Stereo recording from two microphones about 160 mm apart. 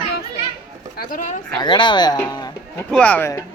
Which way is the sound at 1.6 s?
30° left (ahead or behind).